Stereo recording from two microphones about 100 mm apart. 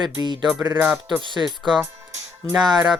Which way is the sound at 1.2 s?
50° right (ahead or behind).